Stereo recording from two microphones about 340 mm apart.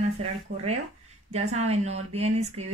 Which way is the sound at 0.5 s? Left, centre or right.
Right.